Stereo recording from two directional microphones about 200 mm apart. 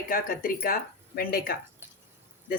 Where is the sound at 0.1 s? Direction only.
45° left (ahead or behind).